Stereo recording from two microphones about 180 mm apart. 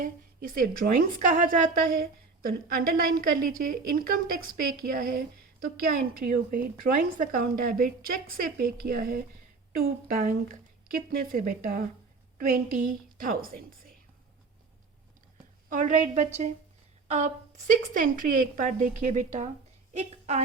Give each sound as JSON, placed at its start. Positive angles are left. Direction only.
{"t": 0.0, "sound": "a woman's voice", "side_deg": -50}
{"t": 15.7, "sound": "a woman's voice", "side_deg": -45}